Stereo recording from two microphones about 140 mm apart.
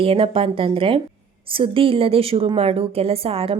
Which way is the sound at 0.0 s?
40° right (ahead or behind).